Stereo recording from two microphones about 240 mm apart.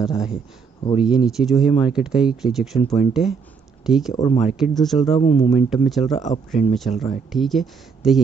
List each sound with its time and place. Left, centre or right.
0.0 s speech: centre
4.1 s speech: centre
4.5 s speech: centre
5.1 s speech: left
5.7 s speech: centre